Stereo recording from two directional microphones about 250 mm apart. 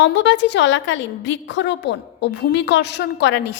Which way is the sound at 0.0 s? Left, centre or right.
Left.